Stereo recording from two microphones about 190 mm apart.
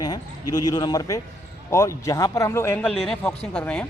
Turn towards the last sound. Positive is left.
turn(degrees=5)  # may be behind; listen again after turning